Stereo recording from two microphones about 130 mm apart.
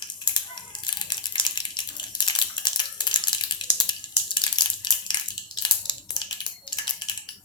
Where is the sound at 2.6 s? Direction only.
35° left (ahead or behind).